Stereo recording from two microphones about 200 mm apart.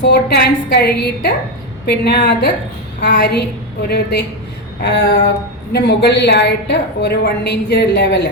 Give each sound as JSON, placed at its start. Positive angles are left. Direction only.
{"t": 0.0, "sound": "a woman's voice", "side_deg": 55}